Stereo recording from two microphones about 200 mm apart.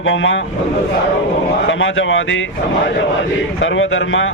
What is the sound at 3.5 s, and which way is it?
Speech, 70° left (ahead or behind).